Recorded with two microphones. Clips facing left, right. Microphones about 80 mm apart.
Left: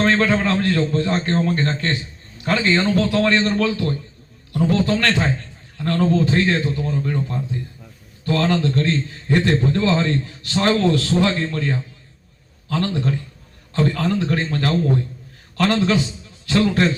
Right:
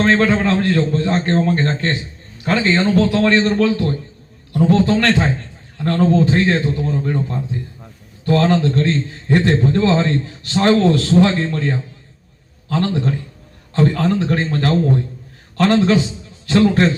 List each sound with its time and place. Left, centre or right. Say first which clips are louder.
0.0 s a man's voice: right 3 dB; right